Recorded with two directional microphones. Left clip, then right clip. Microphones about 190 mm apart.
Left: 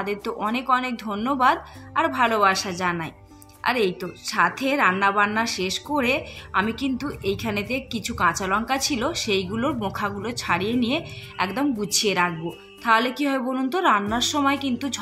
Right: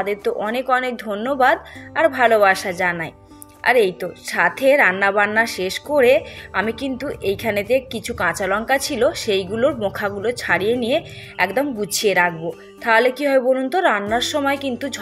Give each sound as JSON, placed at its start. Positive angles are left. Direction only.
{"t": 0.0, "sound": "a woman's voice", "side_deg": -20}